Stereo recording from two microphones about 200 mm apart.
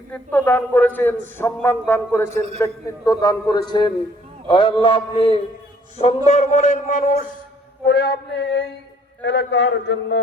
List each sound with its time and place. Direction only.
0.1 s a man's voice: 10° left (ahead or behind); by 7.3 s 40° left (ahead or behind)
7.9 s a man's voice: 55° left (ahead or behind)